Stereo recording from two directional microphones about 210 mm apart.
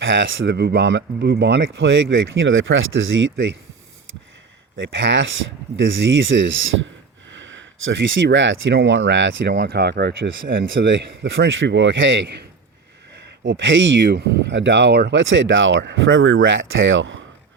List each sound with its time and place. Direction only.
0.0 s speech: 65° right (ahead or behind)
4.8 s speech: 60° right (ahead or behind)
13.4 s speech: 65° right (ahead or behind)
14.1 s speech: 50° right (ahead or behind)